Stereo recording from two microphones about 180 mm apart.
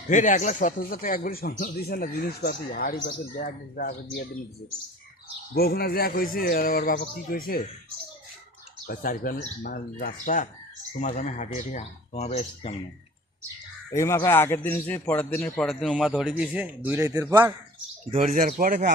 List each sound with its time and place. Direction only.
0.1 s speech: 45° left (ahead or behind)
5.5 s a man's voice: 60° left (ahead or behind)
8.9 s speech: 55° left (ahead or behind)
13.9 s a man's voice: 15° left (ahead or behind); by 17.5 s 10° right (ahead or behind)
18.1 s speech: 40° right (ahead or behind)